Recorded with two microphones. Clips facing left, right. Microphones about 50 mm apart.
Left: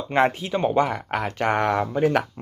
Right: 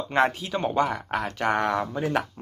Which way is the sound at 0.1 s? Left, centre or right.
Left.